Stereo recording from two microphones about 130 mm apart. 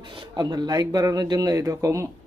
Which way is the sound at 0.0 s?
35° right (ahead or behind).